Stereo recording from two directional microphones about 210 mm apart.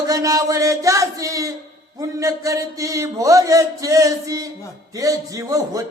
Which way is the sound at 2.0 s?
15° right (ahead or behind).